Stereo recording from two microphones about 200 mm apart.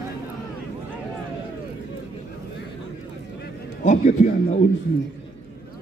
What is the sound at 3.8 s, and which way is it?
Speech, 40° left (ahead or behind).